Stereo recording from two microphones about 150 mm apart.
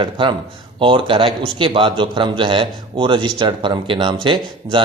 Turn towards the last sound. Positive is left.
turn(degrees=-35)  # may be behind; listen again after turning